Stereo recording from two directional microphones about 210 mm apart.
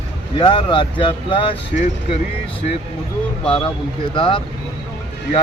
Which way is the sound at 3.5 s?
25° left (ahead or behind).